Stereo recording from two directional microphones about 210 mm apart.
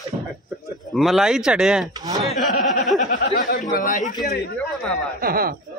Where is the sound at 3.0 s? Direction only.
40° left (ahead or behind).